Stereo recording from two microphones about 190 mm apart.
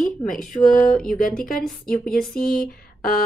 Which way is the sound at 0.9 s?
Centre (ahead or behind).